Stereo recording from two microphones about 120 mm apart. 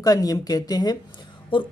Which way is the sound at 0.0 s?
30° left (ahead or behind).